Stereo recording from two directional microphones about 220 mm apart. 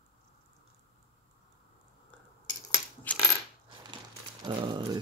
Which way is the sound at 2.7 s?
10° left (ahead or behind).